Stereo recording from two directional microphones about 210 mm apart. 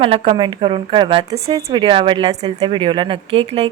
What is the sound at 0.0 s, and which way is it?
A woman's voice, 25° right (ahead or behind).